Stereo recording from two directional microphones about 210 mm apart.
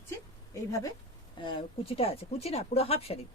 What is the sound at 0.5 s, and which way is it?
A woman's voice, 15° left (ahead or behind).